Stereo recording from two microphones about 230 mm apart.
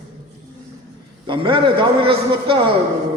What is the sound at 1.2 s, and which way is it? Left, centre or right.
A man's voice, right.